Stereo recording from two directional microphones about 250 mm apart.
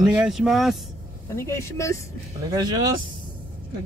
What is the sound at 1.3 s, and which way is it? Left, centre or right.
Speech, centre.